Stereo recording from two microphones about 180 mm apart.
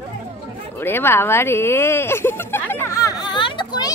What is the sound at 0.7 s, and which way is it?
A woman's voice, 10° left (ahead or behind).